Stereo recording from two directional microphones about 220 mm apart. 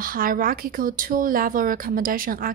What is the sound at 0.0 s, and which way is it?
Speech, 40° right (ahead or behind).